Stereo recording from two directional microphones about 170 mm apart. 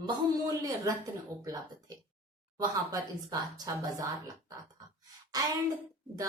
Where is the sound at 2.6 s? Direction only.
20° right (ahead or behind).